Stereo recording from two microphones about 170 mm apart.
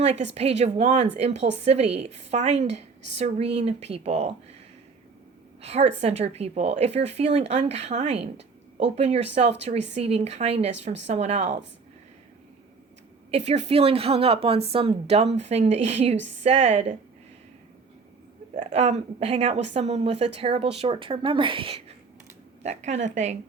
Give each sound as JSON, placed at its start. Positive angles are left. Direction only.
{"t": 0.3, "sound": "a woman's voice", "side_deg": -40}
{"t": 5.6, "sound": "a woman's voice", "side_deg": -40}
{"t": 13.3, "sound": "a woman's voice", "side_deg": -40}
{"t": 18.5, "sound": "a woman's voice", "side_deg": -35}